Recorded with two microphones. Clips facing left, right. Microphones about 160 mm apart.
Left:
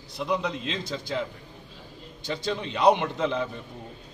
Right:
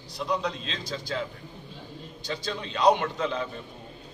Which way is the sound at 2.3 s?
20° left (ahead or behind).